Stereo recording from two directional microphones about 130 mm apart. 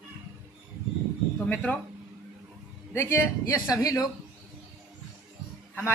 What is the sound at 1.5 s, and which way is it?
Speech, 10° left (ahead or behind).